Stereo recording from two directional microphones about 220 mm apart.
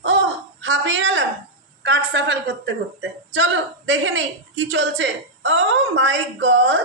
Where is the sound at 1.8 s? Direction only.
55° right (ahead or behind).